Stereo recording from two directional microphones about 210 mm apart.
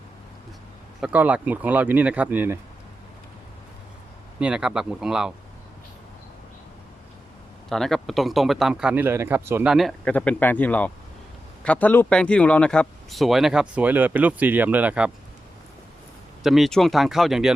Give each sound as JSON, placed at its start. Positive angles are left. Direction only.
{"t": 1.0, "sound": "speech", "side_deg": -5}
{"t": 4.4, "sound": "speech", "side_deg": -5}
{"t": 7.7, "sound": "speech", "side_deg": 0}
{"t": 9.7, "sound": "speech", "side_deg": 0}
{"t": 16.4, "sound": "speech", "side_deg": 0}